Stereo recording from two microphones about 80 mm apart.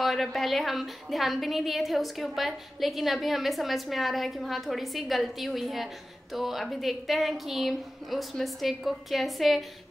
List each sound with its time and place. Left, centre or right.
0.0 s a woman's voice: centre